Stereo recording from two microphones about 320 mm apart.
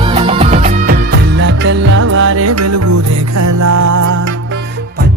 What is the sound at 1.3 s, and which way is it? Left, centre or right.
Music, right.